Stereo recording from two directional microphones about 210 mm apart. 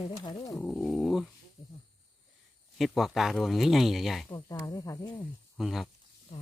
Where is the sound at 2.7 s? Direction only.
Centre (ahead or behind).